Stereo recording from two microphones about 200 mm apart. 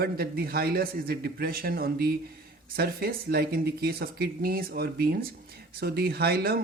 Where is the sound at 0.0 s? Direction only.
50° right (ahead or behind).